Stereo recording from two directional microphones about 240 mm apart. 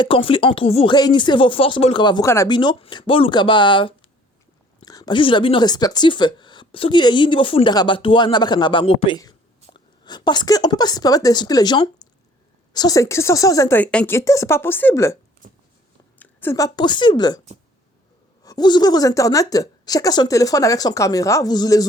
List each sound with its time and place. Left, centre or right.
0.0 s a woman's voice: left
15.4 s a sound: right
16.1 s speech: centre
18.4 s a woman's voice: centre